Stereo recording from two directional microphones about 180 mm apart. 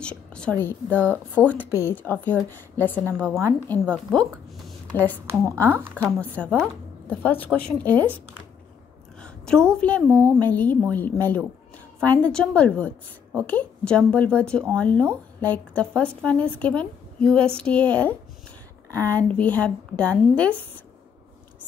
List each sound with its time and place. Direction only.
0.0 s a woman's voice: 5° left (ahead or behind)
3.3 s speech: 15° right (ahead or behind)
3.6 s a woman's voice: 10° left (ahead or behind)
5.4 s speech: 15° right (ahead or behind)
5.9 s a woman's voice: 10° left (ahead or behind)
9.2 s a woman's voice: 5° left (ahead or behind)